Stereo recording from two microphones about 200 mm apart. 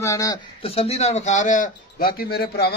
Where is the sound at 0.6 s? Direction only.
30° left (ahead or behind); by 2.7 s 50° left (ahead or behind).